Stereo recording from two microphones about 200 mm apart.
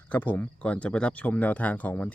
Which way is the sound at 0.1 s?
10° left (ahead or behind).